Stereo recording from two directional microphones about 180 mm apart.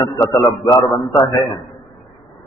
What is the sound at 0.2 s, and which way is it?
A man's voice, 20° left (ahead or behind).